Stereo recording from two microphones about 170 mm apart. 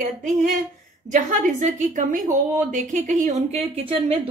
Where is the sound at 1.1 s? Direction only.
50° right (ahead or behind).